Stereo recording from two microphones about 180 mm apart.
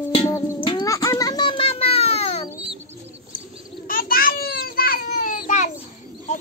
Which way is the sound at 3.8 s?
50° left (ahead or behind).